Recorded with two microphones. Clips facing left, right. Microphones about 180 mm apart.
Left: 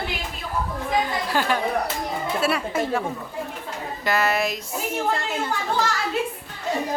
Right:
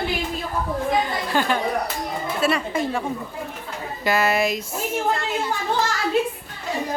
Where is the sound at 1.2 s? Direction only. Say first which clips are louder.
Right 1 dB; 5° left (ahead or behind).